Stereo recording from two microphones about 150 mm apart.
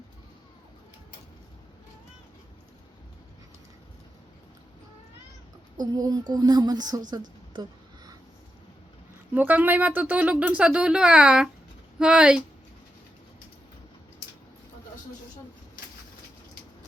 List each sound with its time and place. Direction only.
5.8 s speech: 25° right (ahead or behind)
9.3 s speech: 10° right (ahead or behind)